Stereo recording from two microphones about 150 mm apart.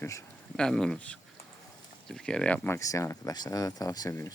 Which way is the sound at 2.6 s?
20° left (ahead or behind).